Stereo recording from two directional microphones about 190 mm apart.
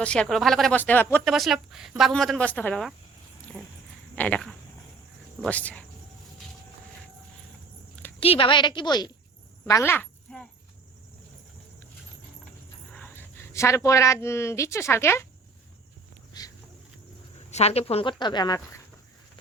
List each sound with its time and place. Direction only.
0.0 s speech: 5° left (ahead or behind)
1.2 s speech: centre (ahead or behind)
4.1 s speech: 10° left (ahead or behind)
8.2 s a woman's voice: 30° left (ahead or behind); by 10.4 s 10° left (ahead or behind)
12.9 s speech: 10° left (ahead or behind)
16.4 s a sound: 20° left (ahead or behind)
17.5 s a woman's voice: 35° left (ahead or behind)